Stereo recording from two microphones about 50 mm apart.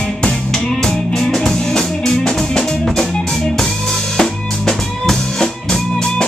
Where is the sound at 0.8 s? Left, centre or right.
Centre.